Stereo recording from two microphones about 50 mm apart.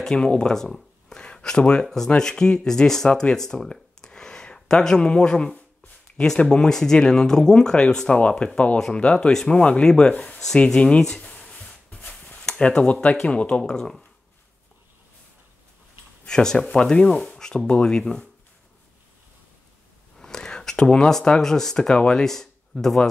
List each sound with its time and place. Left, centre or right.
0.0 s speech: centre
3.1 s a sound: centre
4.6 s speech: centre
8.1 s sanding: left
8.7 s speech: centre
9.6 s sanding: left
10.4 s speech: centre
11.9 s a sound: left
12.2 s speech: centre
16.3 s speech: centre
20.2 s a sound: centre
21.1 s speech: centre